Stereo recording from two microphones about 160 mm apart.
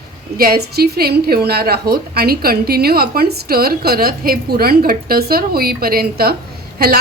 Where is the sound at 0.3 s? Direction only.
75° right (ahead or behind).